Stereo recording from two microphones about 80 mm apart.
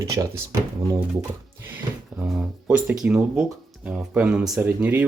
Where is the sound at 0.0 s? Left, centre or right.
Right.